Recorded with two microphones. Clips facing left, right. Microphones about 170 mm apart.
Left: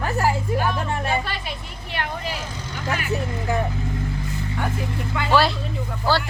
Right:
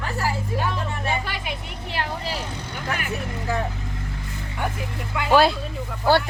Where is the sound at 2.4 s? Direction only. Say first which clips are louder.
Even; 60° right (ahead or behind).